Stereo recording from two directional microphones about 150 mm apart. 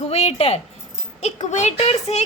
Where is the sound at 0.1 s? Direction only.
45° left (ahead or behind).